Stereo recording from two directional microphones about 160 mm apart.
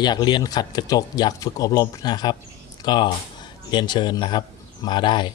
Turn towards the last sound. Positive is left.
turn(degrees=30)  # may be behind; listen again after turning